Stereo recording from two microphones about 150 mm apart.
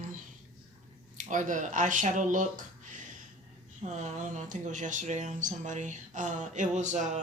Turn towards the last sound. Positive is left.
turn(degrees=-50)  # may be behind; listen again after turning